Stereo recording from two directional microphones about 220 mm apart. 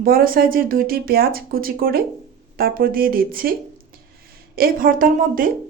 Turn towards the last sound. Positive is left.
turn(degrees=-40)  # may be behind; listen again after turning